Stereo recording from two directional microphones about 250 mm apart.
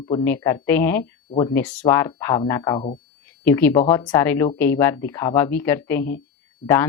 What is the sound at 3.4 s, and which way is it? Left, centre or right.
Speech, centre.